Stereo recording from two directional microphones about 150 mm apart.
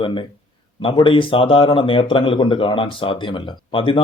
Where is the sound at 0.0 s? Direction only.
35° left (ahead or behind).